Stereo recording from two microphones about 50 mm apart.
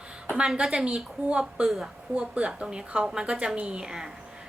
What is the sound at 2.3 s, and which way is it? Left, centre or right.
A woman's voice, right.